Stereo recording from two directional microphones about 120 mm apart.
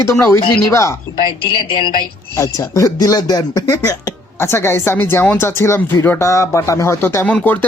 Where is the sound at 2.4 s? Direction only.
30° left (ahead or behind).